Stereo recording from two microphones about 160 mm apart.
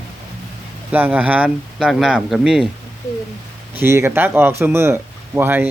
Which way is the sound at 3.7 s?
15° right (ahead or behind).